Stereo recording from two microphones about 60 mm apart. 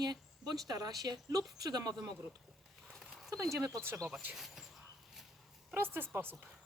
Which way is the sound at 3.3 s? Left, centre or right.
Right.